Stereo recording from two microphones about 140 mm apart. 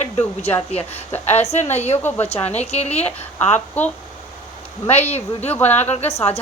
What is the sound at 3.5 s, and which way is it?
Speech, 10° left (ahead or behind).